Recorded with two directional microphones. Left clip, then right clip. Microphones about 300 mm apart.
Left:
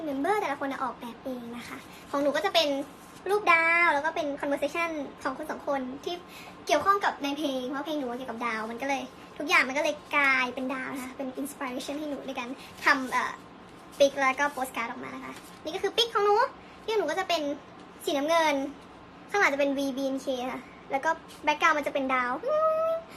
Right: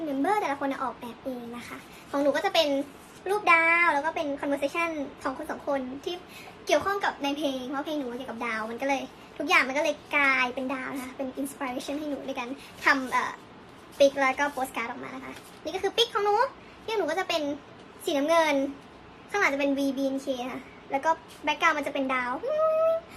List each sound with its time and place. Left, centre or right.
0.2 s a woman's voice: centre
2.1 s a child's voice: centre